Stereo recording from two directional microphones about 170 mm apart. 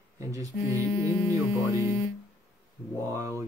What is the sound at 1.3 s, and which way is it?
Speech, 20° right (ahead or behind).